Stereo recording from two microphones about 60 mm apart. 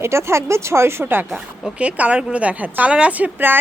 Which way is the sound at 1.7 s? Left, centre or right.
Right.